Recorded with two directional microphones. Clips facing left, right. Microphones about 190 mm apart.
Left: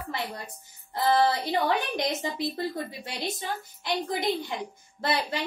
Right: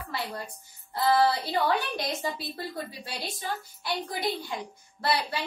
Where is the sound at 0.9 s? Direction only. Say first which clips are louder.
Even; 20° left (ahead or behind).